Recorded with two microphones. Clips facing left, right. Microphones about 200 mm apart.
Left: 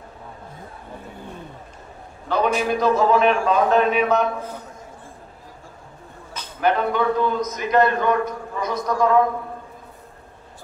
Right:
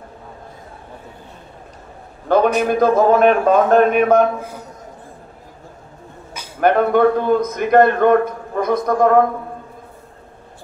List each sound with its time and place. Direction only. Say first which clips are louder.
2.2 s a sound: right 7 dB; 50° right (ahead or behind)
2.7 s speech: right 4 dB; 50° right (ahead or behind)
6.6 s a man's voice: right 7 dB; 55° right (ahead or behind)